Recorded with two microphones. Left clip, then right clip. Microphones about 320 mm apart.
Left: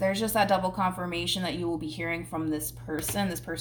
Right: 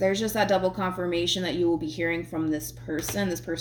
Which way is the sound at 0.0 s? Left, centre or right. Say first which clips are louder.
Right 1 dB; left.